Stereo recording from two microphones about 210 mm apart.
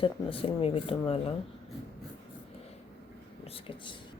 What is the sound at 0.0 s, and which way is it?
Speech, 25° left (ahead or behind).